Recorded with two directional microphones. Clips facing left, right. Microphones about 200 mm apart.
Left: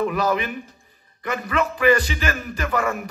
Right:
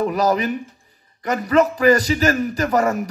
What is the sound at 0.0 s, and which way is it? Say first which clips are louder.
A man's voice: right 3 dB; 40° right (ahead or behind).